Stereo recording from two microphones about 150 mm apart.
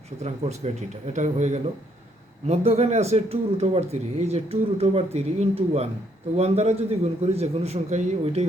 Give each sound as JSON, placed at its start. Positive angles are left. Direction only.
{"t": 0.2, "sound": "speech", "side_deg": -45}